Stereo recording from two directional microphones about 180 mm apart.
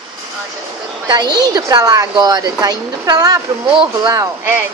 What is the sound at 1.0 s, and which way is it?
A woman's voice, 20° right (ahead or behind).